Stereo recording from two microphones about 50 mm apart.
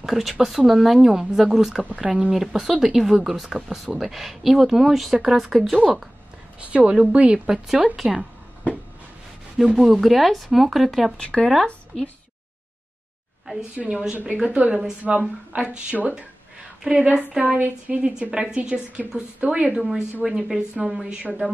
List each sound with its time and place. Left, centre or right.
0.0 s speech: centre
2.0 s a woman's voice: right
2.3 s a woman's voice: centre
6.6 s a woman's voice: right; by 8.3 s centre
9.6 s speech: centre
11.1 s speech: centre
13.8 s a woman's voice: centre
14.5 s a woman's voice: right
17.3 s a woman's voice: centre
17.6 s a woman's voice: right
18.3 s a woman's voice: centre
20.2 s a woman's voice: centre